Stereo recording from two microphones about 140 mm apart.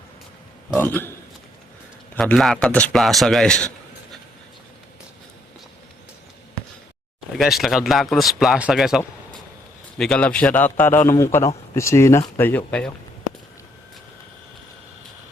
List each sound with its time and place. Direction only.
0.7 s a man's voice: 15° left (ahead or behind)
2.1 s speech: 5° left (ahead or behind)
7.3 s speech: centre (ahead or behind)
10.0 s a man's voice: 10° left (ahead or behind)